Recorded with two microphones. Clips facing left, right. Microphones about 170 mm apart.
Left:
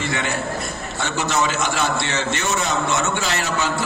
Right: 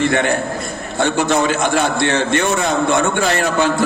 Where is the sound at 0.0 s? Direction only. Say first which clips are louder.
Right 8 dB; 55° right (ahead or behind).